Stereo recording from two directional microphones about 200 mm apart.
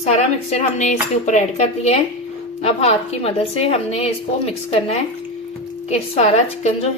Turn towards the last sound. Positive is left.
turn(degrees=35)  # may be behind; listen again after turning